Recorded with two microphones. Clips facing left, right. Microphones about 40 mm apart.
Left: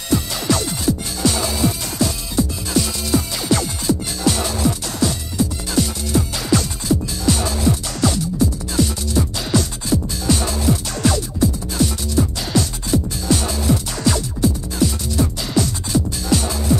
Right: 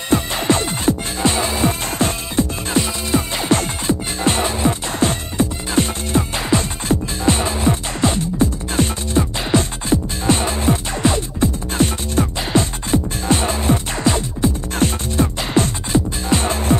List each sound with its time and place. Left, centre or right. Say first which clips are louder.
0.1 s music: right 2 dB; right